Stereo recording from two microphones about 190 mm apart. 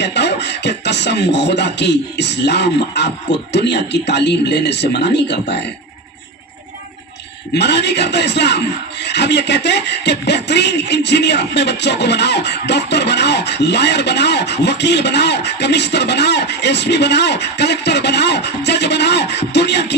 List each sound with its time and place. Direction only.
0.0 s a man's voice: 65° left (ahead or behind)
7.5 s a man's voice: 65° left (ahead or behind)